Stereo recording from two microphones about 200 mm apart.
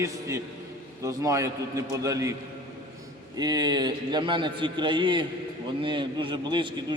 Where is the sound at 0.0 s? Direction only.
15° right (ahead or behind).